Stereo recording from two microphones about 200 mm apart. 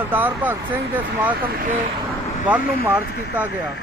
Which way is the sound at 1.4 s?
45° right (ahead or behind).